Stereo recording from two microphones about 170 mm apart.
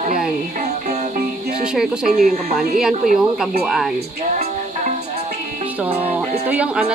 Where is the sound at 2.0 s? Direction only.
55° right (ahead or behind).